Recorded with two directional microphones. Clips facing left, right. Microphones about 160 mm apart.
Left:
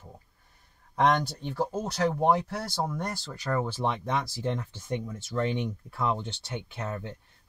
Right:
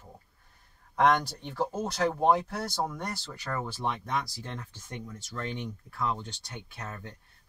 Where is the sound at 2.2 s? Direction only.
5° left (ahead or behind).